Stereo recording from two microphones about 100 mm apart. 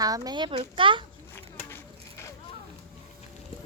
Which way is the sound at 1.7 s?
30° left (ahead or behind).